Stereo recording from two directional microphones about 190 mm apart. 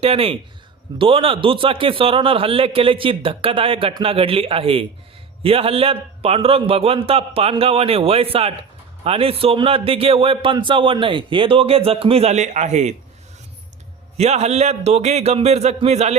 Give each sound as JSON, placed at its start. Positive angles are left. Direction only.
{"t": 0.0, "sound": "a man's voice", "side_deg": -30}
{"t": 14.2, "sound": "a man's voice", "side_deg": -35}